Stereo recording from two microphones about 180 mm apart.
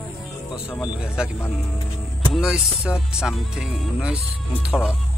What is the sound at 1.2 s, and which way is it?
Speech, 5° right (ahead or behind).